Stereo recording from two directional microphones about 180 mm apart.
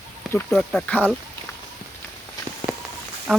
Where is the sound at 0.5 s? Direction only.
5° left (ahead or behind).